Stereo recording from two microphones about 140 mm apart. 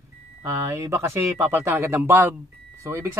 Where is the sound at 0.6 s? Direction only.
20° right (ahead or behind).